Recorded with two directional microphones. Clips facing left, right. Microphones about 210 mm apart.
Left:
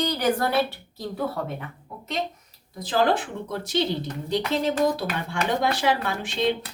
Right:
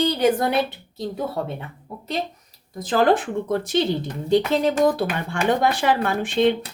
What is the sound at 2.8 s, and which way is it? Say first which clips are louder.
Speech: right 4 dB; 50° right (ahead or behind).